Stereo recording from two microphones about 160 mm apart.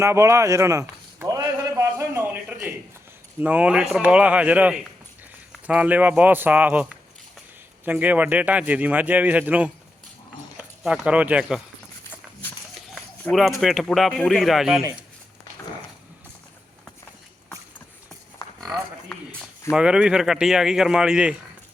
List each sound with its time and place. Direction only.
0.0 s a sound: 20° right (ahead or behind)
3.4 s a man's voice: 10° right (ahead or behind)
13.2 s speech: centre (ahead or behind)
19.7 s speech: 5° right (ahead or behind)